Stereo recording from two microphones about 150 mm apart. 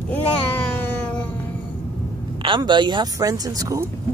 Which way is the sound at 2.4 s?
30° right (ahead or behind).